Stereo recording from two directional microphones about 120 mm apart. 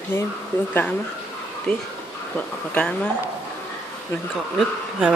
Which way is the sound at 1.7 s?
5° left (ahead or behind).